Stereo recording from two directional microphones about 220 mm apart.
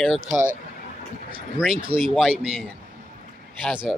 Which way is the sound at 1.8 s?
25° right (ahead or behind).